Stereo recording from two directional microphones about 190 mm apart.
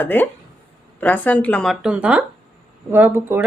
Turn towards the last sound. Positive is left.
turn(degrees=-10)  # may be behind; listen again after turning